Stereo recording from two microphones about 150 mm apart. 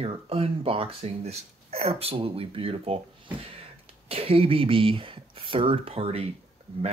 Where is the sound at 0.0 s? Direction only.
40° right (ahead or behind).